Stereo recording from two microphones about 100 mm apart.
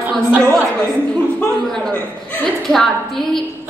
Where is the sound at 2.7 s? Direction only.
5° left (ahead or behind).